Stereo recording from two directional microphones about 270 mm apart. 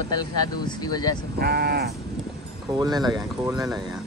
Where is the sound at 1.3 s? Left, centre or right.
Right.